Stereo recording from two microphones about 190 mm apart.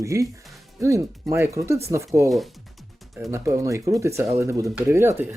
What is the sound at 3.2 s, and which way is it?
Speech, 15° right (ahead or behind).